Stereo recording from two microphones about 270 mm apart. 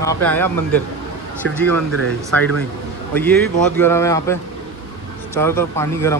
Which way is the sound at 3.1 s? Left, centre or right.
Centre.